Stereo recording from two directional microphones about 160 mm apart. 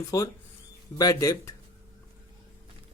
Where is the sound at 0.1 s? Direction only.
20° left (ahead or behind).